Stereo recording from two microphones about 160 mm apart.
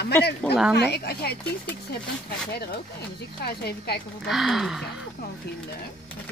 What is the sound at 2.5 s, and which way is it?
A woman's voice, 80° left.